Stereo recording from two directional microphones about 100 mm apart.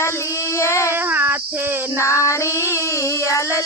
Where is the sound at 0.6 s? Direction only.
30° left (ahead or behind).